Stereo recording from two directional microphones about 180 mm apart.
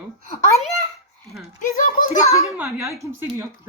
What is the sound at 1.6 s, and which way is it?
Speech, 45° left (ahead or behind).